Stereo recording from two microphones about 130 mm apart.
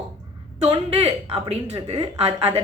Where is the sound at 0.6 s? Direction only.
50° right (ahead or behind).